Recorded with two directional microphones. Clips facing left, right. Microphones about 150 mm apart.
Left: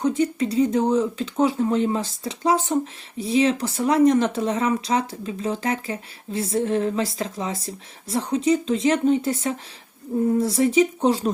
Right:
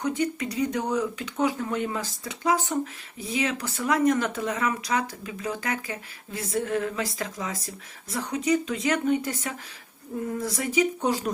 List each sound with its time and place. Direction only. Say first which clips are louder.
0.0 s speech: left 5 dB; 30° left (ahead or behind)